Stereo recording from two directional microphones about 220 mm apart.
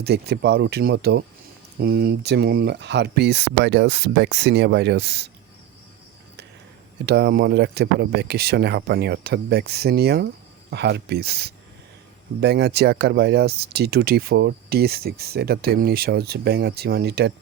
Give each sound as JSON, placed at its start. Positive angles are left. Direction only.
{"t": 0.0, "sound": "speech", "side_deg": -50}
{"t": 7.0, "sound": "speech", "side_deg": -45}